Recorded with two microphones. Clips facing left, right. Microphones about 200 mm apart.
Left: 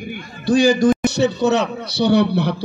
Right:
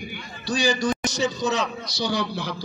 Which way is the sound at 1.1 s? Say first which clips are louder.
Left 8 dB; 65° left (ahead or behind).